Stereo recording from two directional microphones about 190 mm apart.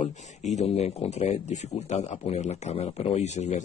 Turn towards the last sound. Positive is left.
turn(degrees=35)  # may be behind; listen again after turning